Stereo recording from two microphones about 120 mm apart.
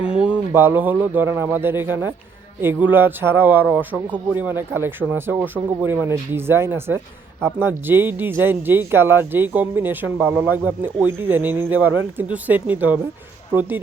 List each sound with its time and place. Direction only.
0.2 s speech: 15° right (ahead or behind)